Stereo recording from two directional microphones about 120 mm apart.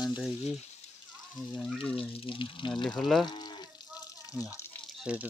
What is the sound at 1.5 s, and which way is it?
Speech, centre (ahead or behind).